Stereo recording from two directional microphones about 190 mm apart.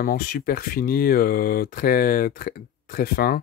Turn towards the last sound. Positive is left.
turn(degrees=50)  # may be behind; listen again after turning